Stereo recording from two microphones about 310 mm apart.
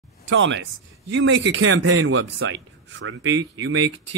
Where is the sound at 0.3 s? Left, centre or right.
Right.